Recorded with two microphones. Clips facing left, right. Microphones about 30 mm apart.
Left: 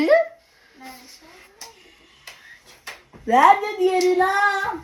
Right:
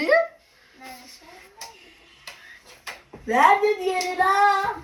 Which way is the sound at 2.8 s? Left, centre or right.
Right.